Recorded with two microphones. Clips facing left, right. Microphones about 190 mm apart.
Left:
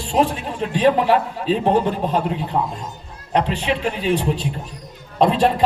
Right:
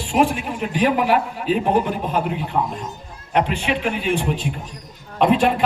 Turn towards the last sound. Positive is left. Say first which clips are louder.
# even
turn(degrees=35)  # may be behind; listen again after turning